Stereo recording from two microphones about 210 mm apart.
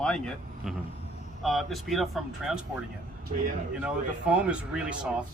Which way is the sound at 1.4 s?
Centre (ahead or behind).